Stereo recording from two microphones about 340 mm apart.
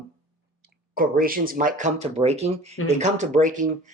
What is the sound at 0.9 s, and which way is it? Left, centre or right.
Speech, right.